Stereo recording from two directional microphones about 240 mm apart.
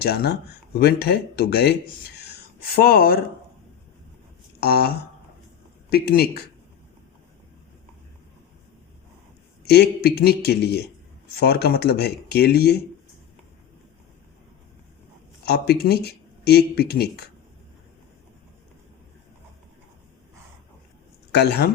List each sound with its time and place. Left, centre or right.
0.0 s speech: left
4.6 s speech: left
9.6 s speech: left
15.4 s speech: left
21.3 s speech: left